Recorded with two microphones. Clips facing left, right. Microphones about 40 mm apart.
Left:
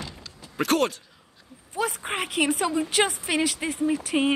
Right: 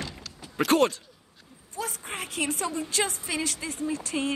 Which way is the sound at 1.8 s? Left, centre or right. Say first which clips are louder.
Left 7 dB; left.